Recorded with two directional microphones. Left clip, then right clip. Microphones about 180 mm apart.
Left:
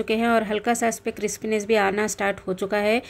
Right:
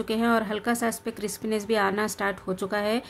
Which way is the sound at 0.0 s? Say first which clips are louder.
Left 3 dB; 15° left (ahead or behind).